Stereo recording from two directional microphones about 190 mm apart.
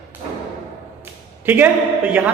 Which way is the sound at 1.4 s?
10° right (ahead or behind).